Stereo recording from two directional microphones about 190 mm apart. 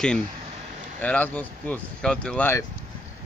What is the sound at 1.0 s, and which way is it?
Speech, 10° left (ahead or behind).